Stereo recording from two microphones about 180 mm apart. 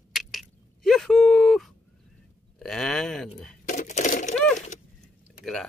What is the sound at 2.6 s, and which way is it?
Speech, centre (ahead or behind).